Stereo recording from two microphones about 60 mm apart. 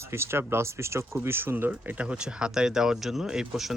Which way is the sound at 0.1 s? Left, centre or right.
Right.